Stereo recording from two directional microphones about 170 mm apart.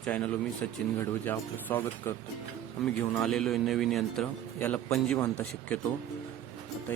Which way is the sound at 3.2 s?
5° left (ahead or behind).